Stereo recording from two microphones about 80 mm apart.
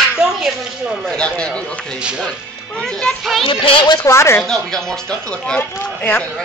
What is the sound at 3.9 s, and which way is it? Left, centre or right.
Speech, left.